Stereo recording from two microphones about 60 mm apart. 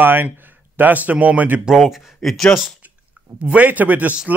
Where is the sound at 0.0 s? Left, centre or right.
Right.